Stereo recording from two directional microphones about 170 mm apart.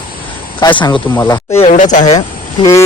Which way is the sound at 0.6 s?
25° left (ahead or behind).